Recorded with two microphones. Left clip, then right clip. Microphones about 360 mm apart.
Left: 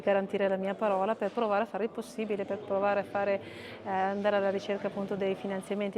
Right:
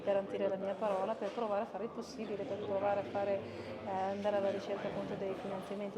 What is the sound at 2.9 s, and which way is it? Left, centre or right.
A woman's voice, left.